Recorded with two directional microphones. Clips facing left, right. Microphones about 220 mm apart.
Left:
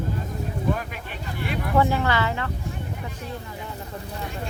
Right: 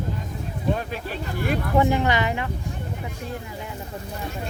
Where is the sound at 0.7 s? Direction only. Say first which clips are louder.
Right 4 dB; 35° right (ahead or behind).